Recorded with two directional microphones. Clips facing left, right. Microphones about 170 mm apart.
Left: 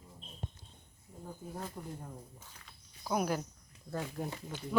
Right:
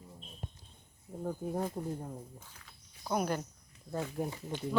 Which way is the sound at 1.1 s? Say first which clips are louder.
Right 9 dB; 55° right (ahead or behind).